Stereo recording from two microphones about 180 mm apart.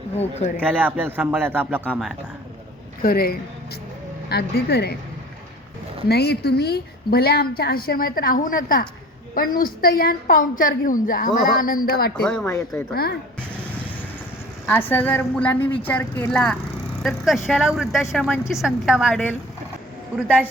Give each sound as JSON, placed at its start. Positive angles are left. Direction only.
{"t": 0.2, "sound": "speech", "side_deg": 35}
{"t": 0.6, "sound": "a man's voice", "side_deg": -10}
{"t": 3.0, "sound": "a woman's voice", "side_deg": 55}
{"t": 6.1, "sound": "a woman's voice", "side_deg": 65}
{"t": 12.1, "sound": "speech", "side_deg": 5}
{"t": 12.5, "sound": "a woman's voice", "side_deg": 15}
{"t": 12.9, "sound": "a woman's voice", "side_deg": 60}
{"t": 14.7, "sound": "a woman's voice", "side_deg": 10}